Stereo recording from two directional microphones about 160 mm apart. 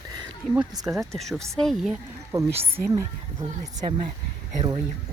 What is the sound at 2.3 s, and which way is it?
Speech, 15° right (ahead or behind).